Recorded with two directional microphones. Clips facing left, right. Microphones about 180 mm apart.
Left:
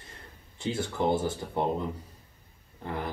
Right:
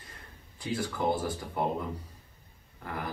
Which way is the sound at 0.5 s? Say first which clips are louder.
Left 2 dB; 25° left (ahead or behind).